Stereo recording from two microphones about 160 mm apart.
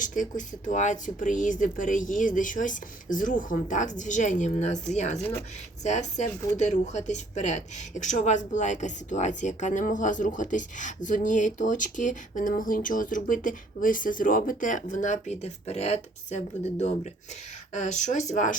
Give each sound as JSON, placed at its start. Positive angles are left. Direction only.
{"t": 0.0, "sound": "a woman's voice", "side_deg": 55}
{"t": 5.1, "sound": "speech", "side_deg": 10}
{"t": 5.8, "sound": "a woman's voice", "side_deg": 45}